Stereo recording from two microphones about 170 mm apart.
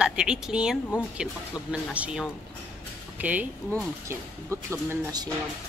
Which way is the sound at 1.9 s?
5° right (ahead or behind).